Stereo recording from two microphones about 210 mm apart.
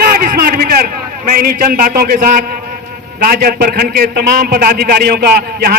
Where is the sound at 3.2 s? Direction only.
45° right (ahead or behind).